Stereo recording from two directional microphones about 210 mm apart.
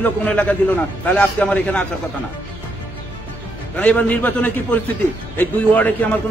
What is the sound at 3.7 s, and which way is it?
A man's voice, 5° left (ahead or behind).